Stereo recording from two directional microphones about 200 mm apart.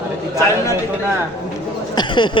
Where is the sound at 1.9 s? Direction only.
20° left (ahead or behind).